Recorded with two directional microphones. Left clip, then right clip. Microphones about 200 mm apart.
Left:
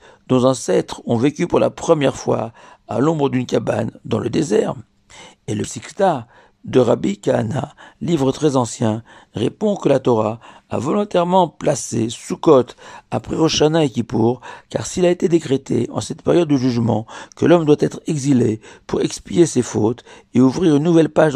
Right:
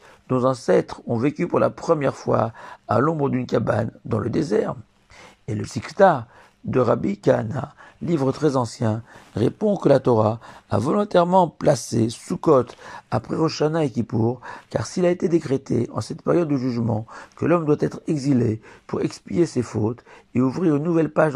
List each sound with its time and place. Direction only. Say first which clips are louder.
0.3 s speech: left 3 dB; 35° left (ahead or behind)
9.3 s speech: left 2 dB; 15° left (ahead or behind)
15.2 s speech: left 4 dB; 35° left (ahead or behind)
16.9 s speech: left 7 dB; 20° left (ahead or behind)
17.4 s speech: left 6 dB; 40° left (ahead or behind)
19.7 s speech: left 7 dB; 25° left (ahead or behind)
20.6 s speech: left 5 dB; 40° left (ahead or behind)